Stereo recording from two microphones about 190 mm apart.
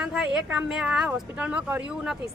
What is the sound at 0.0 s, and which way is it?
Speech, 5° right (ahead or behind).